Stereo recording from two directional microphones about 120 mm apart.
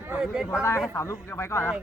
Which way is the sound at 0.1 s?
5° right (ahead or behind).